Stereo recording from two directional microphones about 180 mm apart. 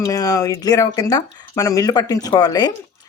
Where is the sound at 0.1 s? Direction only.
20° left (ahead or behind).